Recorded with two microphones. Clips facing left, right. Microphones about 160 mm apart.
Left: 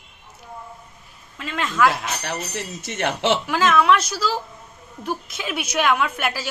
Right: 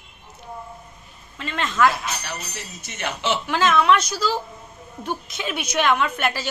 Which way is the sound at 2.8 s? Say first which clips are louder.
Left 4 dB; 70° left (ahead or behind).